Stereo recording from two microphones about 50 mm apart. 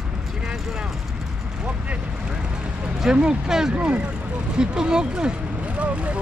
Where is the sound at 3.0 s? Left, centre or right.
Centre.